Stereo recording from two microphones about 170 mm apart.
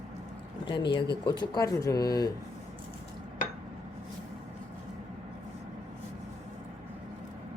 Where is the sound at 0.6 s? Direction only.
30° left (ahead or behind).